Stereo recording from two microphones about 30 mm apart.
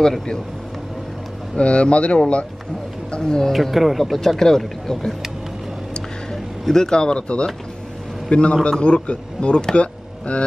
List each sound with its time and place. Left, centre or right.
1.6 s speech: left
3.1 s speech: left
3.5 s speech: centre
4.4 s speech: centre
6.7 s speech: centre
7.0 s speech: left
9.8 s a sound: left